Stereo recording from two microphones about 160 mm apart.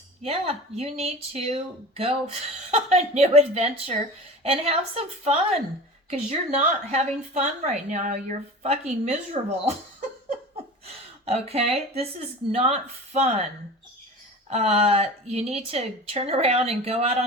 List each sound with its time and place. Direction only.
0.2 s a woman's voice: 40° right (ahead or behind)
10.8 s a woman's voice: 40° right (ahead or behind)
14.5 s speech: 40° right (ahead or behind)